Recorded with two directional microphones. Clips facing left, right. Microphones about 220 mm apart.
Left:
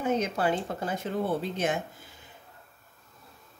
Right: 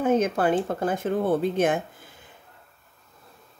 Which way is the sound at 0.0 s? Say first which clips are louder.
Right 5 dB; 50° right (ahead or behind).